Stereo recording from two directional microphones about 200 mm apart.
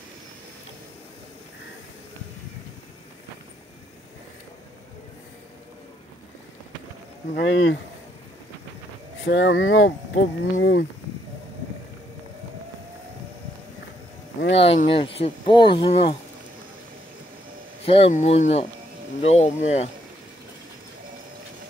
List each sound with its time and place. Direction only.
7.3 s speech: 65° left (ahead or behind)
9.2 s speech: 65° left (ahead or behind)
14.5 s speech: 30° left (ahead or behind)
17.8 s speech: 30° left (ahead or behind)